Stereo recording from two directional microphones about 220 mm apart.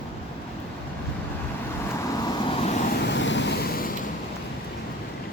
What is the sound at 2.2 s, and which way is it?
Vehicle, 25° left (ahead or behind).